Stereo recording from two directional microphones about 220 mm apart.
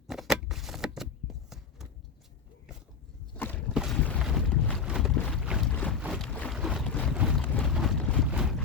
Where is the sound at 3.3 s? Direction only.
10° left (ahead or behind).